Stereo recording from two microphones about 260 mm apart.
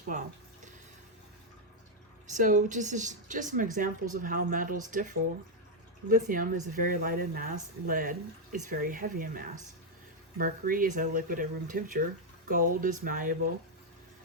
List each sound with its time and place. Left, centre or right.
0.1 s a woman's voice: right
2.3 s a woman's voice: right